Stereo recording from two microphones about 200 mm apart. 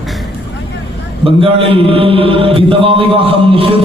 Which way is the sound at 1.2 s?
25° right (ahead or behind).